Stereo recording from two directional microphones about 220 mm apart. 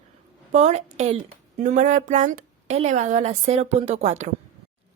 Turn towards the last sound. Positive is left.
turn(degrees=-30)  # may be behind; listen again after turning